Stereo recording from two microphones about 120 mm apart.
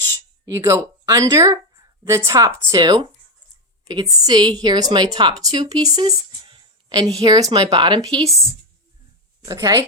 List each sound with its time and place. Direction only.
0.4 s a woman's voice: 25° right (ahead or behind)
6.0 s a sound: 40° right (ahead or behind)
7.2 s speech: 30° right (ahead or behind)
9.5 s speech: 30° right (ahead or behind)